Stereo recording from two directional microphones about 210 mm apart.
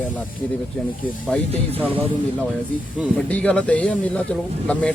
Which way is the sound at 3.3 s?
5° left (ahead or behind).